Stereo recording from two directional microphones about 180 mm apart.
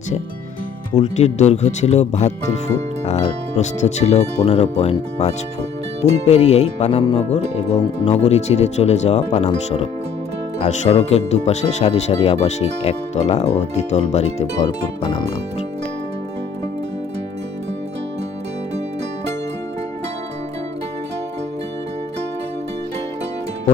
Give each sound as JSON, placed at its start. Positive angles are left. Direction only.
{"t": 0.9, "sound": "music", "side_deg": 40}